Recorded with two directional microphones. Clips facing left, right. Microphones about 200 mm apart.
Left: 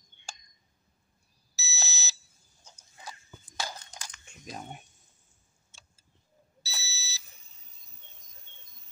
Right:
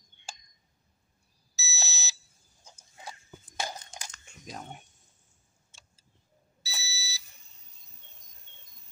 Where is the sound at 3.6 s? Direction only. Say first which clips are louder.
Right 2 dB; 20° right (ahead or behind).